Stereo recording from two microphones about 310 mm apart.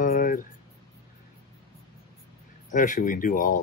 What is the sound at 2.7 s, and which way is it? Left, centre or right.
Speech, left.